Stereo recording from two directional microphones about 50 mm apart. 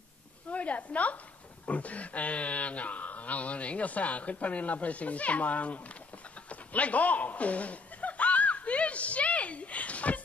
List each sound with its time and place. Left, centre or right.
0.5 s a woman's voice: left
6.5 s chuckle: left